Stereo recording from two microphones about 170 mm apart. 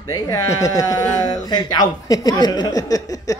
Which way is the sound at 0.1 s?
20° left (ahead or behind).